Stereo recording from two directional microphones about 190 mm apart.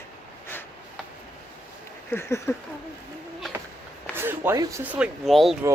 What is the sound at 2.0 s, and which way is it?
Speech, 10° left (ahead or behind).